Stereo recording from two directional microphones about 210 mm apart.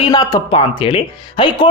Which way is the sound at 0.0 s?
20° left (ahead or behind).